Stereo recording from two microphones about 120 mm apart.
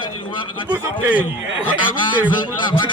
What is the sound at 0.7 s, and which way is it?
Speech, 15° right (ahead or behind).